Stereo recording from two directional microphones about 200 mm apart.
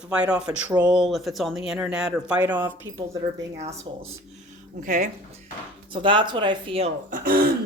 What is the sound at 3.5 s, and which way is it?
Speech, 35° right (ahead or behind).